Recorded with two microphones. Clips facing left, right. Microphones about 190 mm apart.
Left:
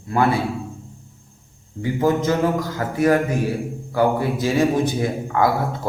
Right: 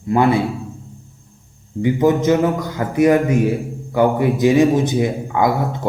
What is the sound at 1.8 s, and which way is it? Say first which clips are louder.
A man's voice: right 4 dB; 20° right (ahead or behind).